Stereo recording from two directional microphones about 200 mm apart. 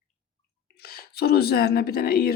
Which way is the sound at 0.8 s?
50° left (ahead or behind).